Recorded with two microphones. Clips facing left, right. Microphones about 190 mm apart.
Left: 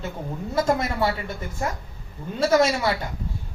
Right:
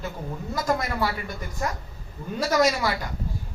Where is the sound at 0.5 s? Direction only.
25° left (ahead or behind).